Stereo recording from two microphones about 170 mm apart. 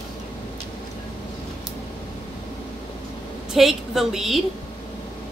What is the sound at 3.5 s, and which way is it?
Speech, centre (ahead or behind).